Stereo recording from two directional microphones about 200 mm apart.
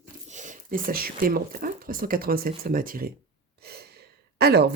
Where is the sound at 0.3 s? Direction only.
40° right (ahead or behind).